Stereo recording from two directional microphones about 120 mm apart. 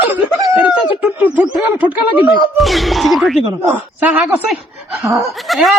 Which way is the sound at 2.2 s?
Centre (ahead or behind).